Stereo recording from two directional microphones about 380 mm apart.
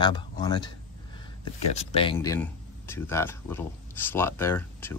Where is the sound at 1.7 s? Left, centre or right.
Centre.